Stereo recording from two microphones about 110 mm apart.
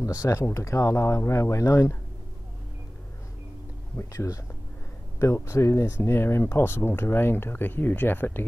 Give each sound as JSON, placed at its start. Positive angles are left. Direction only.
{"t": 0.0, "sound": "speech", "side_deg": 30}
{"t": 3.9, "sound": "speech", "side_deg": 25}